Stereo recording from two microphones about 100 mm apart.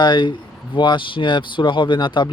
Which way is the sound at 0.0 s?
50° left (ahead or behind).